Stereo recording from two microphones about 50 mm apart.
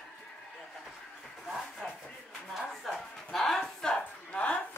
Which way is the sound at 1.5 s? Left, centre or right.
Centre.